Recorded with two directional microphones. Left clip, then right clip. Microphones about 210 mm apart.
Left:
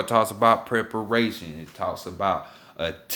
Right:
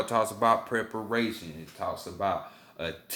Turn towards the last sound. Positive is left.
turn(degrees=40)  # may be behind; listen again after turning